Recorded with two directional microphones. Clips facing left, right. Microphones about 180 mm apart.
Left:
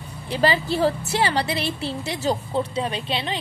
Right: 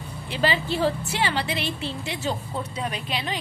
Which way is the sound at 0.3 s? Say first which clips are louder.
Left 3 dB; 40° left (ahead or behind).